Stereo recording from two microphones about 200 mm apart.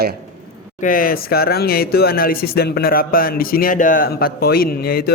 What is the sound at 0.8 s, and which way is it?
Speech, 45° left (ahead or behind).